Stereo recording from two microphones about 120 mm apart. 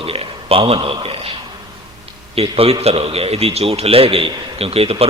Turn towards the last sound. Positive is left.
turn(degrees=-55)  # may be behind; listen again after turning